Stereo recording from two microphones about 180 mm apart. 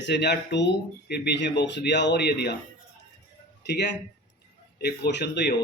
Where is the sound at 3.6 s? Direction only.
65° left (ahead or behind).